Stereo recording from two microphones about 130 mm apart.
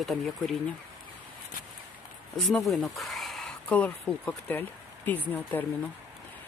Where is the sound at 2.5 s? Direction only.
Centre (ahead or behind).